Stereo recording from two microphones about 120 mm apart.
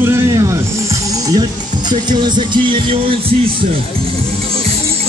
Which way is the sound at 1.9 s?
40° right (ahead or behind).